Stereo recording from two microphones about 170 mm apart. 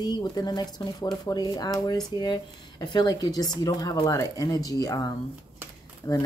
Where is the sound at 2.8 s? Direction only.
25° left (ahead or behind).